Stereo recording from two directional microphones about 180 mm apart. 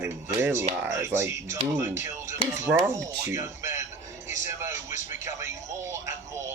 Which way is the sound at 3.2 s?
15° right (ahead or behind).